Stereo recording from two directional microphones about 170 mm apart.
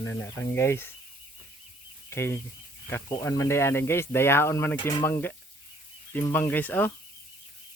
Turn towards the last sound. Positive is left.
turn(degrees=10)  # may be behind; listen again after turning